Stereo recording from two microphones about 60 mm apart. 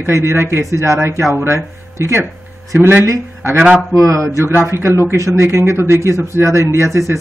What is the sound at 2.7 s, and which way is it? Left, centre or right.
Speech, right.